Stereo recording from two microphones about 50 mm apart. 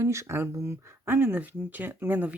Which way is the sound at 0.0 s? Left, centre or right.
Right.